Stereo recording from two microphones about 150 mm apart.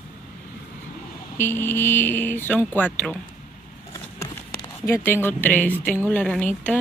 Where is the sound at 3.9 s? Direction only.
20° left (ahead or behind).